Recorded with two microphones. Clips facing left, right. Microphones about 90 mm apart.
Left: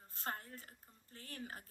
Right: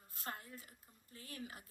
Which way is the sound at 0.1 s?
40° left (ahead or behind).